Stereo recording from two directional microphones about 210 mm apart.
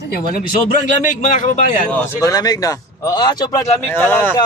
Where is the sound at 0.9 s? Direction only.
35° left (ahead or behind).